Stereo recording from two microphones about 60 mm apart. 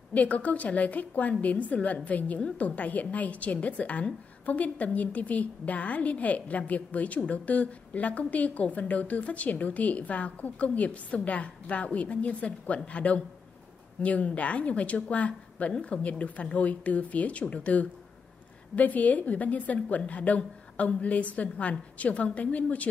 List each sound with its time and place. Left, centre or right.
0.1 s a woman's voice: left